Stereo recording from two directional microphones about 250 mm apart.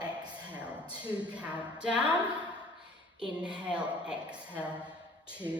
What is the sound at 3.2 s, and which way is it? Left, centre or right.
A woman's voice, centre.